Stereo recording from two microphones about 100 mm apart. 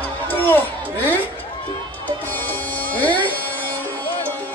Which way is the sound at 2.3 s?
15° left (ahead or behind).